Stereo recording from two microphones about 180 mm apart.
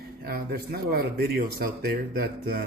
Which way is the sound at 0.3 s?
60° right (ahead or behind).